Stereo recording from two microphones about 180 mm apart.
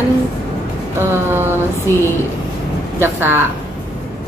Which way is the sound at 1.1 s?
15° right (ahead or behind).